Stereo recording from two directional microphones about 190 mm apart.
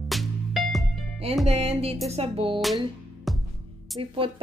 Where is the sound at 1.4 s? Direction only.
35° right (ahead or behind).